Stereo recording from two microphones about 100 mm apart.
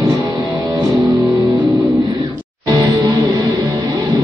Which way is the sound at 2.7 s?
40° right (ahead or behind).